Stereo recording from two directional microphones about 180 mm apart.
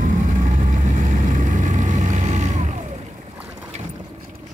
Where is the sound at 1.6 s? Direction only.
40° right (ahead or behind).